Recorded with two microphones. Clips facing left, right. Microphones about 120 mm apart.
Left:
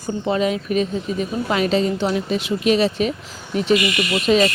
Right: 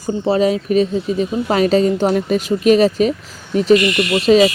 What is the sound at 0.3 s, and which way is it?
Speech, 35° right (ahead or behind).